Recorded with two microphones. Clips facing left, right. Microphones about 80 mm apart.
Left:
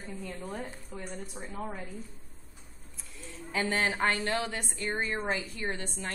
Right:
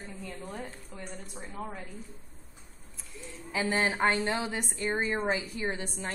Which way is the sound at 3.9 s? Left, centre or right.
Centre.